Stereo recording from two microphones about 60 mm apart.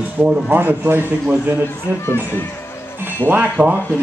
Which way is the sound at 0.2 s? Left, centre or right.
Right.